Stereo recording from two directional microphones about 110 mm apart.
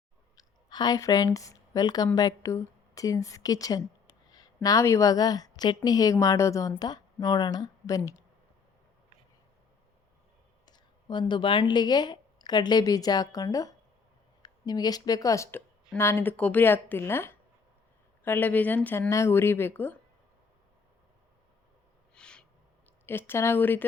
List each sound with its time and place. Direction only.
0.3 s a woman's voice: 40° left (ahead or behind)
10.7 s a sound: 45° left (ahead or behind)
11.7 s a woman's voice: 40° left (ahead or behind); by 20.0 s 20° left (ahead or behind)
22.1 s gasp: 10° left (ahead or behind)
23.0 s speech: 20° left (ahead or behind)